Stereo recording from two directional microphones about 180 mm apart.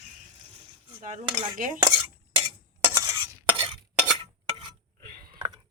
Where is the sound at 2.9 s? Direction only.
20° right (ahead or behind).